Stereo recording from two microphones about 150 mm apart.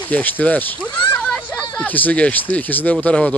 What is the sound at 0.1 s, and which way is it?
Speech, 10° left (ahead or behind).